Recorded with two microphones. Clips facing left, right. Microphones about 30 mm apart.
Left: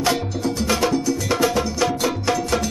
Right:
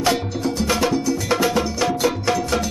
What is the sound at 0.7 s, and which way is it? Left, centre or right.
Music, centre.